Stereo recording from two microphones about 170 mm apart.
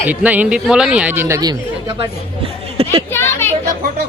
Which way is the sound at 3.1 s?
15° left (ahead or behind).